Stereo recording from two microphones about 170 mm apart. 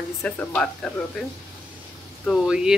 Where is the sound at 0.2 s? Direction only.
5° left (ahead or behind).